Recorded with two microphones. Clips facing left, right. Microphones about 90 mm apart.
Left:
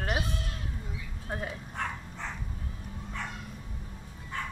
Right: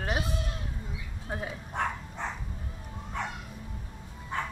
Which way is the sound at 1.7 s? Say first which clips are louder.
Right 4 dB; 25° right (ahead or behind).